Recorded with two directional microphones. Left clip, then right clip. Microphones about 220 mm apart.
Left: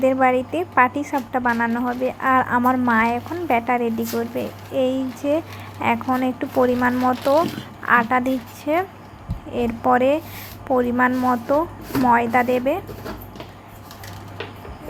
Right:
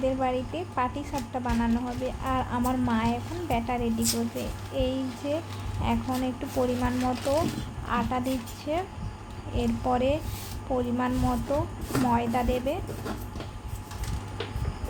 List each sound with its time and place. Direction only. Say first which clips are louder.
0.0 s a woman's voice: left 10 dB; 25° left (ahead or behind)
9.8 s a woman's voice: left 10 dB; 25° left (ahead or behind)